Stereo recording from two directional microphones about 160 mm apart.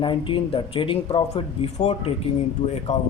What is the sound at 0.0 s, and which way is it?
A man's voice, 30° left (ahead or behind).